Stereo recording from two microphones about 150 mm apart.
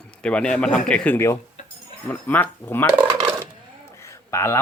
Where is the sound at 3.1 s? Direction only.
20° right (ahead or behind).